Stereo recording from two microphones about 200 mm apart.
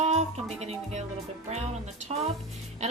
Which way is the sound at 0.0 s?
35° right (ahead or behind).